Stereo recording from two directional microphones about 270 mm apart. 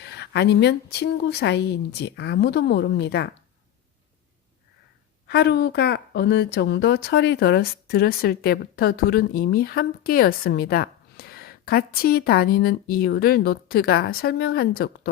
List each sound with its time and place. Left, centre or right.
0.0 s speech: left
5.3 s speech: left